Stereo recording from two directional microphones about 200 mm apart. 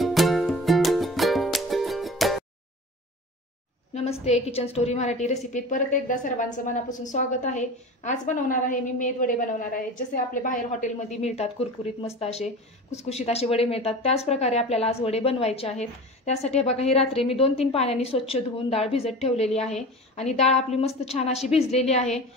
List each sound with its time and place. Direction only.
0.0 s music: centre (ahead or behind)
3.9 s a woman's voice: 30° left (ahead or behind)